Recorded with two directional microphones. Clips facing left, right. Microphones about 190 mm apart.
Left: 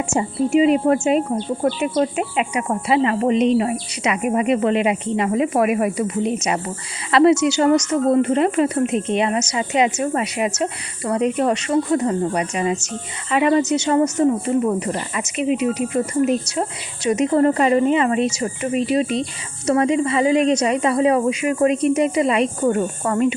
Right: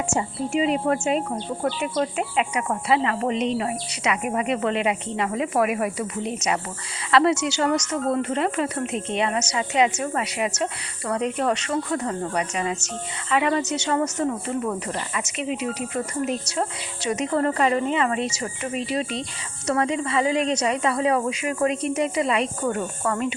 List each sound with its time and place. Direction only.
0.1 s a woman's voice: 10° left (ahead or behind)
2.0 s a woman's voice: 15° left (ahead or behind)
15.4 s a woman's voice: 15° left (ahead or behind)